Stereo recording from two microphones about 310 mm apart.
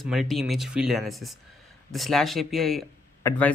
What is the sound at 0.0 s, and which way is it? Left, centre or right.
Speech, centre.